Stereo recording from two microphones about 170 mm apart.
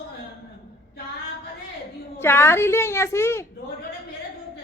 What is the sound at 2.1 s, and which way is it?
Speech, 15° left (ahead or behind).